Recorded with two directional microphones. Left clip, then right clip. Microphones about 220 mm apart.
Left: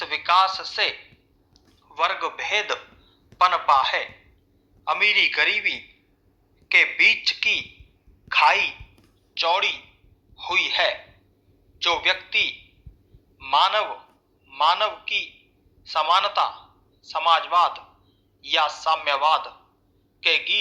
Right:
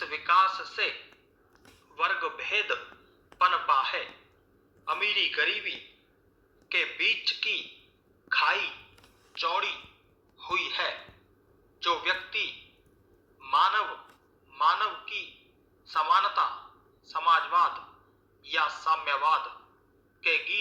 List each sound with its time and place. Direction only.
0.0 s a man's voice: 55° left (ahead or behind)
2.0 s a man's voice: 55° left (ahead or behind)